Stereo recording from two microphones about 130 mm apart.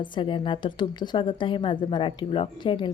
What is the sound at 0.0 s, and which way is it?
Speech, 35° left (ahead or behind).